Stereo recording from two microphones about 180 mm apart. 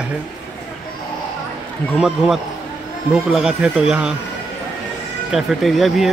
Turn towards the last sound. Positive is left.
turn(degrees=0)  # may be behind; listen again after turning